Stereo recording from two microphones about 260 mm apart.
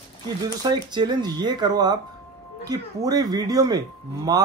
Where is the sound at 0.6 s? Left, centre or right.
Centre.